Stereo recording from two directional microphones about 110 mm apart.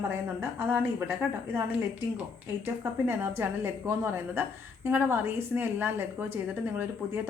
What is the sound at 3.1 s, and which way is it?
A woman's voice, 20° right (ahead or behind).